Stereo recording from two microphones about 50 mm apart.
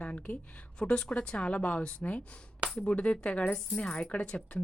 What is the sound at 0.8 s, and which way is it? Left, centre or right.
A woman's voice, centre.